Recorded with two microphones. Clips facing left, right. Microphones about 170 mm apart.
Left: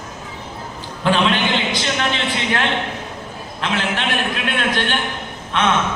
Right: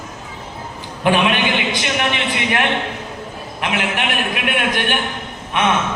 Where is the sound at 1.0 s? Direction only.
15° right (ahead or behind).